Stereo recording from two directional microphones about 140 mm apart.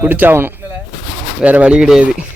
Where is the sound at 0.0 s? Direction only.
15° right (ahead or behind).